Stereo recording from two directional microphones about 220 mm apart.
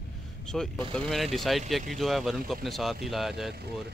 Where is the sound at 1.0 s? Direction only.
Centre (ahead or behind).